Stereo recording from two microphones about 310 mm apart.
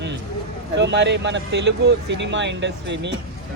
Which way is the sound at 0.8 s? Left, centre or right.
Right.